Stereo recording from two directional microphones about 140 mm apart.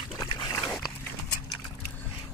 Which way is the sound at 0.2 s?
30° left (ahead or behind).